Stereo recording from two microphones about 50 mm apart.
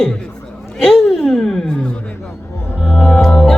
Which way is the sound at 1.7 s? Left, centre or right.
Left.